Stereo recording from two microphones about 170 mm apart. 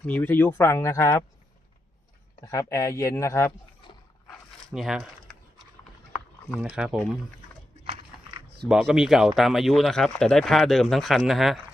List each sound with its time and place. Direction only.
0.0 s speech: 10° left (ahead or behind)
2.5 s speech: 20° left (ahead or behind)
4.7 s speech: centre (ahead or behind)
6.6 s speech: 5° right (ahead or behind)
8.6 s speech: 5° right (ahead or behind)